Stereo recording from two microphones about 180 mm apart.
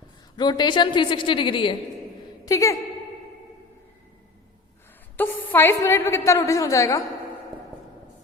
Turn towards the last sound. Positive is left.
turn(degrees=15)  # may be behind; listen again after turning